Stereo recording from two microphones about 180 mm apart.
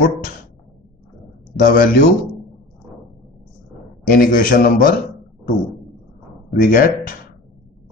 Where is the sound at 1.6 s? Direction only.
Centre (ahead or behind).